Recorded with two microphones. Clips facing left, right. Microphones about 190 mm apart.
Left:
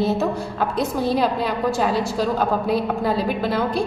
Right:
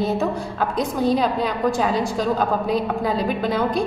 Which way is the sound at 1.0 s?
5° left (ahead or behind).